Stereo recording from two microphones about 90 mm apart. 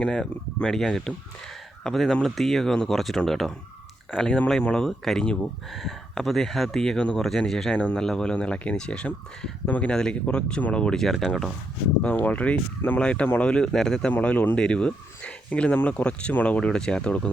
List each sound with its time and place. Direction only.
0.0 s speech: 10° left (ahead or behind)
12.0 s speech: 20° left (ahead or behind)